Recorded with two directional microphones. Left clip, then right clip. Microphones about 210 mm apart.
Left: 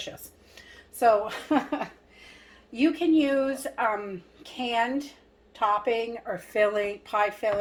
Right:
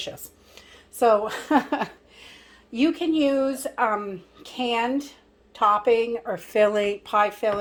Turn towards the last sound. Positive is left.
turn(degrees=-45)  # may be behind; listen again after turning